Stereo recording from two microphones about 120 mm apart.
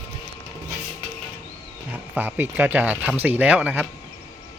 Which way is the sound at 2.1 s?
15° right (ahead or behind).